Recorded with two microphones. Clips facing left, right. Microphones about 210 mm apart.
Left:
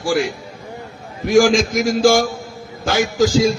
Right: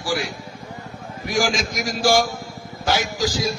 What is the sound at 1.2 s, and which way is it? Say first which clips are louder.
Speech: left 10 dB; 55° left (ahead or behind).